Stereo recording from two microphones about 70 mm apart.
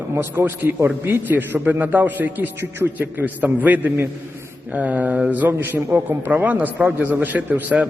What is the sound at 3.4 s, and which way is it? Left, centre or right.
A man's voice, right.